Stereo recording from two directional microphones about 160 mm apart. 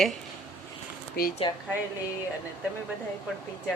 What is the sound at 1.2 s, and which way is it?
Speech, 70° left (ahead or behind).